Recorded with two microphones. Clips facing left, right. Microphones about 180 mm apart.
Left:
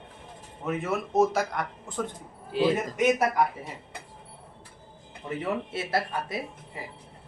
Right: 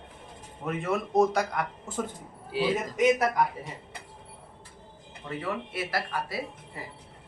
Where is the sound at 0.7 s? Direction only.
5° left (ahead or behind).